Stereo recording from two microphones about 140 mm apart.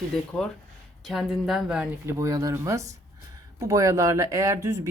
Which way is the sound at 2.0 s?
25° right (ahead or behind).